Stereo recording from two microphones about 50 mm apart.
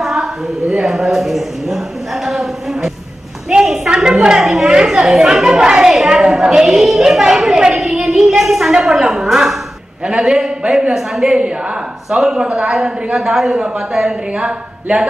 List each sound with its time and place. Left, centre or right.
0.0 s a woman's voice: centre
3.4 s a sound: centre
3.9 s a woman's voice: centre